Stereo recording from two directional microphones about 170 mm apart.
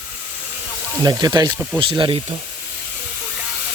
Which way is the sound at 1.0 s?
20° right (ahead or behind).